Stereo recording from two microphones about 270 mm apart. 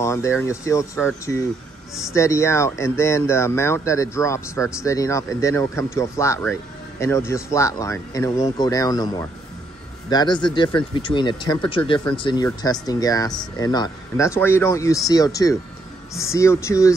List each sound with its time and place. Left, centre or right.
0.0 s speech: centre